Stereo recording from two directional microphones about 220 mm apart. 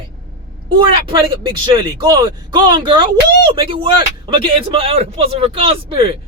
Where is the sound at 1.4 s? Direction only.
25° right (ahead or behind).